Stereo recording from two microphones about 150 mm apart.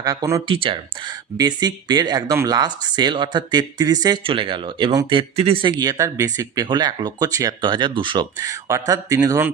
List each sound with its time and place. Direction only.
0.0 s speech: 25° right (ahead or behind)
0.4 s speech: 35° right (ahead or behind)
5.8 s speech: 25° right (ahead or behind)